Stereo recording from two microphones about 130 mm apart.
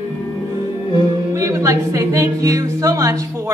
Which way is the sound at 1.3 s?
25° right (ahead or behind).